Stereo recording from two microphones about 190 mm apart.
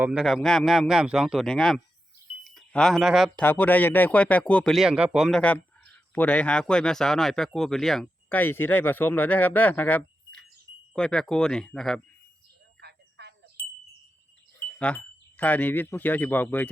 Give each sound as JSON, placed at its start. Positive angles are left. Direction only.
{"t": 0.0, "sound": "speech", "side_deg": -5}
{"t": 3.4, "sound": "speech", "side_deg": 10}
{"t": 12.8, "sound": "cricket", "side_deg": -60}
{"t": 14.6, "sound": "speech", "side_deg": 10}